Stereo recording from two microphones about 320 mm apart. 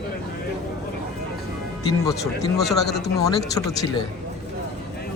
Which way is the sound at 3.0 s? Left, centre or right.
Centre.